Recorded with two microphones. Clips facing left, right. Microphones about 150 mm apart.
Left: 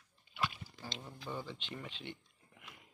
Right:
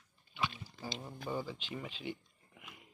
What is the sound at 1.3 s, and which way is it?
Speech, 5° right (ahead or behind).